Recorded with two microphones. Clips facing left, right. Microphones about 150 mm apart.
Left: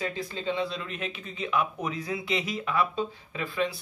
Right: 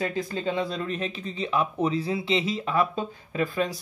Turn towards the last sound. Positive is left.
turn(degrees=-45)  # may be behind; listen again after turning